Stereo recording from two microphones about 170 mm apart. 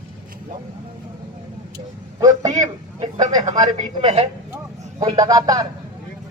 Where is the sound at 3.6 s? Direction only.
25° right (ahead or behind).